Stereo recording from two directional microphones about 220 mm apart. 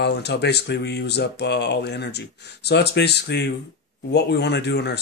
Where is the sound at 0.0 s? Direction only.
50° left (ahead or behind).